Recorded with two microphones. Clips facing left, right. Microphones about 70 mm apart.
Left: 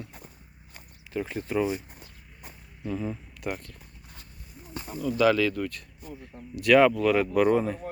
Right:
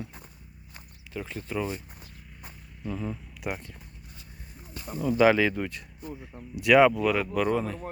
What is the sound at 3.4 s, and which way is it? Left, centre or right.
Speech, centre.